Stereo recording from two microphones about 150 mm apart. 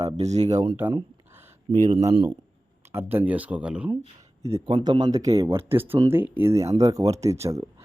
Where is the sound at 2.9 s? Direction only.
15° right (ahead or behind).